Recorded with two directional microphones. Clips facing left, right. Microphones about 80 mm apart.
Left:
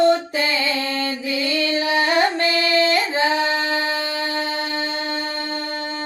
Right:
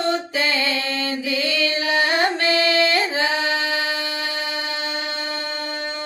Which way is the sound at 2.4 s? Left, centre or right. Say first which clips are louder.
Right 1 dB; right.